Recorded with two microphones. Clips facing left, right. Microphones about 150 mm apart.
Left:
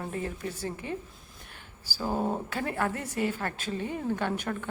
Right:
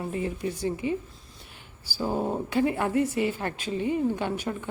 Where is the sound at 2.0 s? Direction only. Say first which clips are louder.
Right 2 dB; centre (ahead or behind).